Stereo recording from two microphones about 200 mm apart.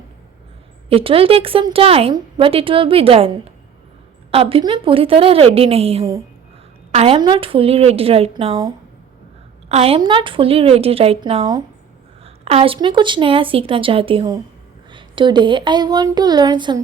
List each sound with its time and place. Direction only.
0.9 s a woman's voice: 30° right (ahead or behind)